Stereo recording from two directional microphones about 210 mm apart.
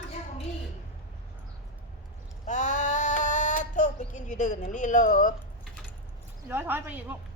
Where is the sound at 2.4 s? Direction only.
35° left (ahead or behind).